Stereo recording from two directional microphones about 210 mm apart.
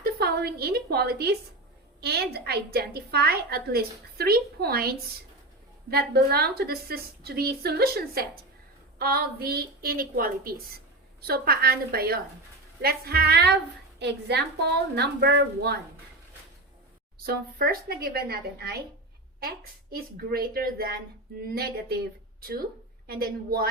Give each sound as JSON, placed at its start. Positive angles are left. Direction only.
{"t": 0.0, "sound": "a woman's voice", "side_deg": -50}
{"t": 17.2, "sound": "a woman's voice", "side_deg": -45}